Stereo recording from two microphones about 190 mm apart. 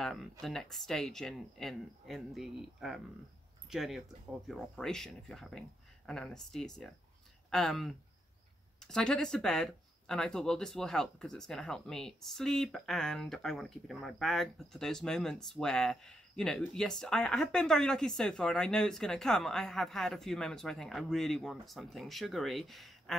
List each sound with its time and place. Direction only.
0.0 s speech: centre (ahead or behind)